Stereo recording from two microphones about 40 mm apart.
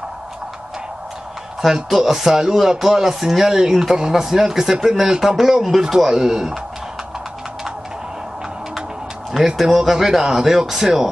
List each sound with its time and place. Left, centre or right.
1.6 s speech: centre
9.6 s speech: centre